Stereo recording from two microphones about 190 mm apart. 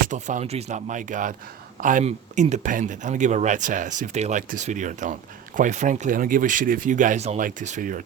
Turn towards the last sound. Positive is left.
turn(degrees=-40)  # may be behind; listen again after turning